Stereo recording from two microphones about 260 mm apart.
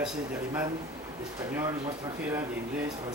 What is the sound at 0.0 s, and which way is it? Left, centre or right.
Speech, centre.